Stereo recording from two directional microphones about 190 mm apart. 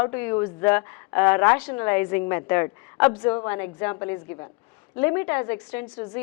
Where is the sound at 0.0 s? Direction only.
15° left (ahead or behind).